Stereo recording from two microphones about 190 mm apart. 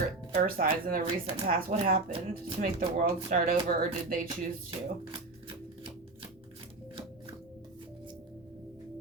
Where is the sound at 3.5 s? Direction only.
50° right (ahead or behind).